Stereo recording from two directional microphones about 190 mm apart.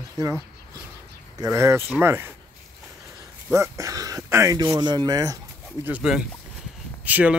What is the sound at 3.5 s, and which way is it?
Speech, 15° right (ahead or behind).